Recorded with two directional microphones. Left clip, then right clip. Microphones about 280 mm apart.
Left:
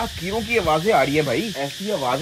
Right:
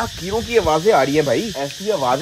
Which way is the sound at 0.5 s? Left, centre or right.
Centre.